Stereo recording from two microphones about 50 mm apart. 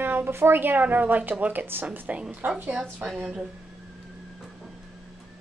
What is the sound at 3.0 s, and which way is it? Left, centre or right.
Speech, centre.